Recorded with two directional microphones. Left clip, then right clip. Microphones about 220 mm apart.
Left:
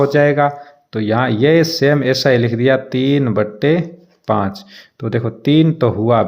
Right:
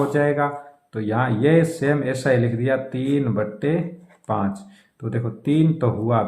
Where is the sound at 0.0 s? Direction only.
40° left (ahead or behind).